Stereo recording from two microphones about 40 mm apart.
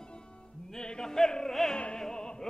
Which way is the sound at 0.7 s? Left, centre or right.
Centre.